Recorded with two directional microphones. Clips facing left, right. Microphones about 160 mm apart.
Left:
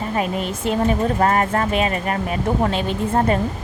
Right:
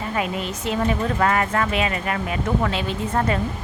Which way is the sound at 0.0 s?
35° left (ahead or behind).